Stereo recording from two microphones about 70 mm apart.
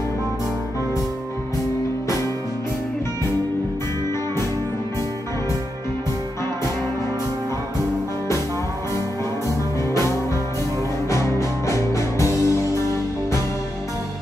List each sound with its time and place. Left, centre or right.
11.1 s music: left